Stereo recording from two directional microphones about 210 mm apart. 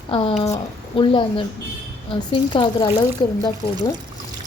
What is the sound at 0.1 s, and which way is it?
A woman's voice, 25° left (ahead or behind).